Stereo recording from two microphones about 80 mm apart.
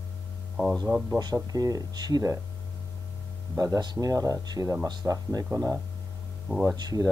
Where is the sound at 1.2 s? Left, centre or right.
Right.